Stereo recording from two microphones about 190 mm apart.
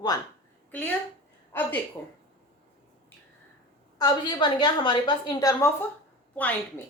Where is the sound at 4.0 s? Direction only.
20° left (ahead or behind).